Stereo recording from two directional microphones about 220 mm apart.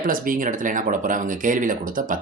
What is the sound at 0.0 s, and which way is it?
Speech, 40° right (ahead or behind).